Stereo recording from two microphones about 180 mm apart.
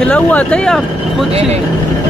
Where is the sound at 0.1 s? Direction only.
5° left (ahead or behind).